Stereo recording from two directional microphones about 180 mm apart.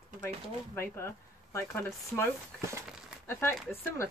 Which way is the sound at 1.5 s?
15° left (ahead or behind).